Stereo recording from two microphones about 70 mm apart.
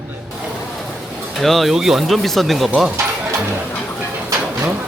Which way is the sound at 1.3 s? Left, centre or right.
Centre.